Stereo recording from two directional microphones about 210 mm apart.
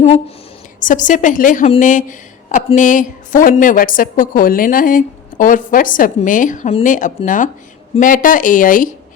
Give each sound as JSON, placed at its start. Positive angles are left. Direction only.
{"t": 0.8, "sound": "speech", "side_deg": 40}